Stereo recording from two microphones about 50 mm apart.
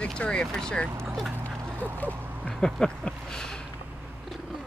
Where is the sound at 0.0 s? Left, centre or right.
Centre.